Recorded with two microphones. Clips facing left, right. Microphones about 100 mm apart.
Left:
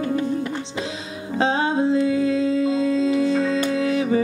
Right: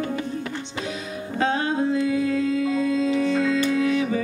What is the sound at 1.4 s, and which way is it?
Music, 25° left (ahead or behind).